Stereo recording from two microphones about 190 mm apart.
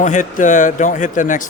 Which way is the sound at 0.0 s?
40° left (ahead or behind).